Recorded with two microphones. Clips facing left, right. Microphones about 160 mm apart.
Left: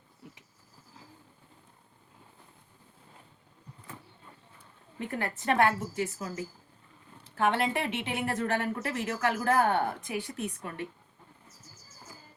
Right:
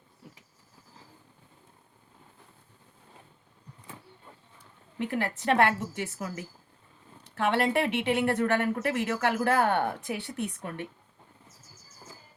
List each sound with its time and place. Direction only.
4.9 s a woman's voice: 85° right; by 10.8 s 65° right (ahead or behind)